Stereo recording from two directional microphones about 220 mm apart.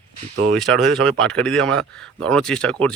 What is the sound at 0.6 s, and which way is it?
Speech, centre (ahead or behind).